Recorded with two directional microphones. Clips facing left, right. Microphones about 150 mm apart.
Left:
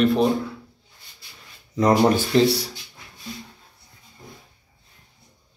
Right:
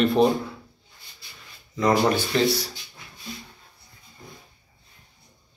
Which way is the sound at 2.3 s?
30° left (ahead or behind).